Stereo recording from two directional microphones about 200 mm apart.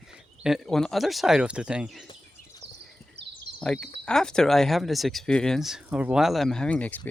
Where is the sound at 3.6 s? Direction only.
5° left (ahead or behind).